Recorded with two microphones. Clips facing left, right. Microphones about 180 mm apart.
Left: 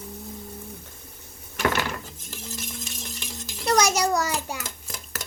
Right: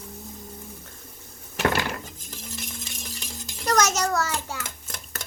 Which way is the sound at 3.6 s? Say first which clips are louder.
Left 1 dB; 10° left (ahead or behind).